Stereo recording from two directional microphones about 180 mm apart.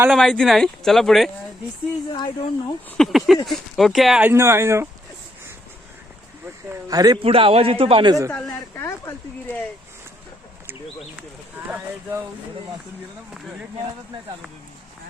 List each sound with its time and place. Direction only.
0.1 s speech: 5° left (ahead or behind)
2.1 s speech: 25° left (ahead or behind)
3.0 s speech: centre (ahead or behind)
6.7 s a man's voice: 20° right (ahead or behind)
8.3 s speech: 5° left (ahead or behind)